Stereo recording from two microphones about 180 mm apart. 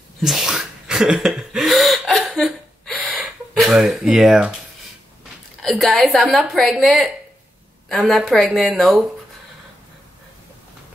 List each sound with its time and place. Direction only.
0.2 s gasp: centre (ahead or behind)
5.6 s speech: centre (ahead or behind)